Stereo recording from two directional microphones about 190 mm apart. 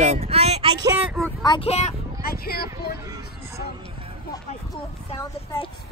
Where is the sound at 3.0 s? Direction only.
20° right (ahead or behind).